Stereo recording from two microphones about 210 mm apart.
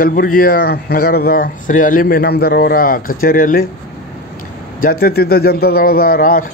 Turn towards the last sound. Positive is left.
turn(degrees=40)  # may be behind; listen again after turning